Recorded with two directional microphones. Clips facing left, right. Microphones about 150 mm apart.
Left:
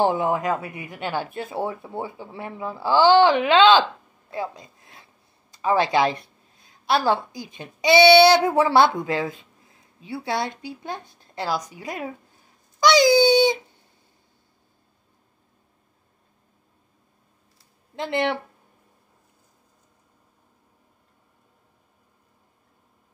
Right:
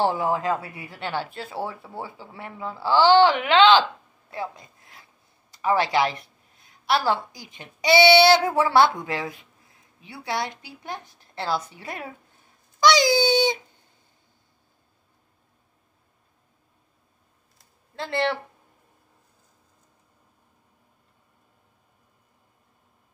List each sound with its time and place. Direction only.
0.0 s speech: 20° left (ahead or behind)
4.3 s a sound: 20° left (ahead or behind)
5.5 s a woman's voice: 20° left (ahead or behind)
13.2 s dog: 20° right (ahead or behind)
17.9 s speech: 15° left (ahead or behind)